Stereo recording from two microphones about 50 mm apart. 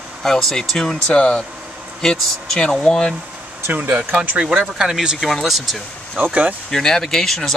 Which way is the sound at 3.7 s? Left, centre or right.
Right.